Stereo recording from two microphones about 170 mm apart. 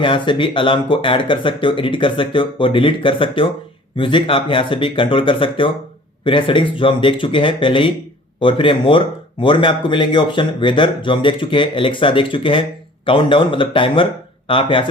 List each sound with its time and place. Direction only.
0.0 s speech: 30° left (ahead or behind)